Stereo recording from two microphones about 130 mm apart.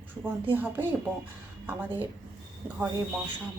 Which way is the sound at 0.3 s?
15° right (ahead or behind).